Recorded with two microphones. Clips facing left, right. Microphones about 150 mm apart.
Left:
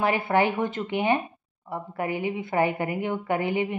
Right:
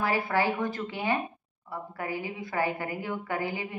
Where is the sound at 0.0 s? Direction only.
20° left (ahead or behind).